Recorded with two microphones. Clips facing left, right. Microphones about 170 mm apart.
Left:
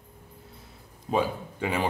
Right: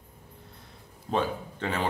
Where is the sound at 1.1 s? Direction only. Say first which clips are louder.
Left 2 dB; 10° left (ahead or behind).